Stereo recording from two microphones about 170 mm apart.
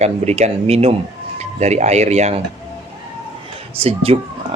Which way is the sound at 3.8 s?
35° right (ahead or behind).